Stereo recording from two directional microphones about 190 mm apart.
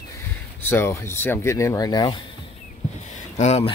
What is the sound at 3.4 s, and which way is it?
Speech, 35° left (ahead or behind).